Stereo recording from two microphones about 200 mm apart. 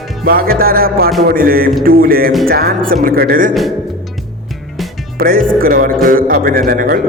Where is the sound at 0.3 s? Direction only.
50° right (ahead or behind).